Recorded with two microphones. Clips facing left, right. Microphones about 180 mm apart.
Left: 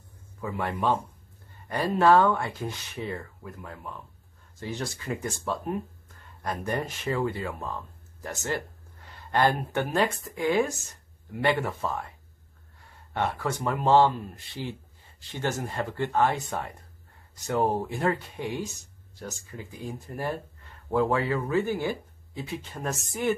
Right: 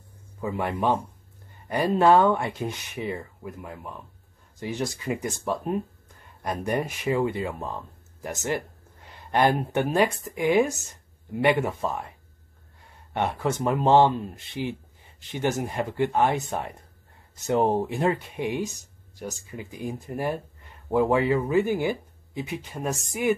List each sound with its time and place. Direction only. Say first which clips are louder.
0.4 s speech: right 3 dB; 20° right (ahead or behind)
13.1 s speech: right 3 dB; 20° right (ahead or behind)